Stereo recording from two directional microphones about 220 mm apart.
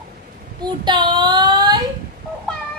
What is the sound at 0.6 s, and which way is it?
Child singing, 20° right (ahead or behind).